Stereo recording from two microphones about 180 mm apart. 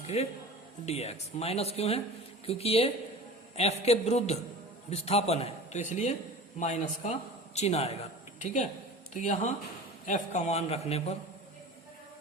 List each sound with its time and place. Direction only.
0.1 s a man's voice: 35° left (ahead or behind)